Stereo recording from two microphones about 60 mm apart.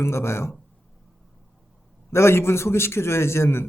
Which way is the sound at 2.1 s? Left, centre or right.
Left.